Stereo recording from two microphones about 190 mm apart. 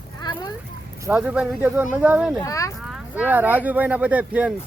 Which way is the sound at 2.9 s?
10° right (ahead or behind).